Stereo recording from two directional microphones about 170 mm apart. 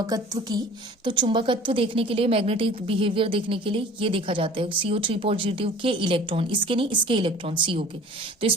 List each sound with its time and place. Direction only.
0.1 s a woman's voice: 20° right (ahead or behind)